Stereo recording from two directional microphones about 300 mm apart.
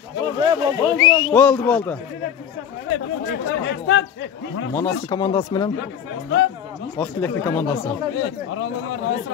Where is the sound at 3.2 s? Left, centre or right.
Left.